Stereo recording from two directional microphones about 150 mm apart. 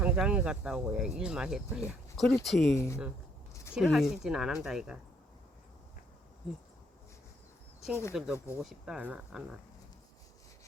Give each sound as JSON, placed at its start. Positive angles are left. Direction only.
{"t": 0.0, "sound": "speech", "side_deg": -10}
{"t": 2.7, "sound": "speech", "side_deg": 20}
{"t": 3.5, "sound": "a sound", "side_deg": 20}
{"t": 3.8, "sound": "speech", "side_deg": 0}
{"t": 8.1, "sound": "speech", "side_deg": 0}